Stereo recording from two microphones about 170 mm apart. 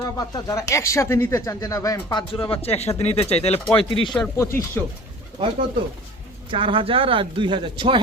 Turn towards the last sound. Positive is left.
turn(degrees=-30)  # may be behind; listen again after turning